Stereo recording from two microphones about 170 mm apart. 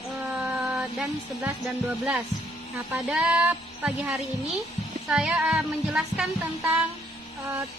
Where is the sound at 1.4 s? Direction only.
5° right (ahead or behind).